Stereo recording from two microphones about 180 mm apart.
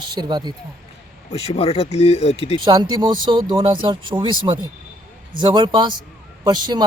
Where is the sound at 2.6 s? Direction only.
20° right (ahead or behind).